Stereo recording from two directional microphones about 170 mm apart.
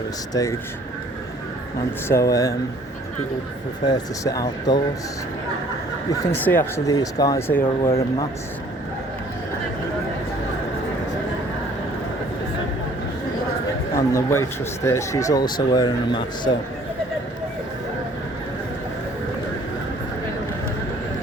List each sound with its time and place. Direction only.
0.4 s speech: 20° left (ahead or behind)
2.0 s speech: 20° left (ahead or behind)
3.8 s speech: 20° left (ahead or behind)
6.1 s speech: 10° left (ahead or behind)
13.9 s speech: 20° left (ahead or behind)